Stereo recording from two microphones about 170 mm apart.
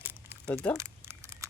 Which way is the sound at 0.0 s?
10° right (ahead or behind).